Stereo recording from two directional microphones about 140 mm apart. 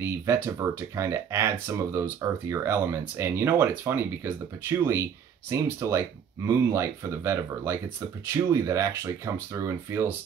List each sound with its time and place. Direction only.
0.0 s speech: 20° right (ahead or behind)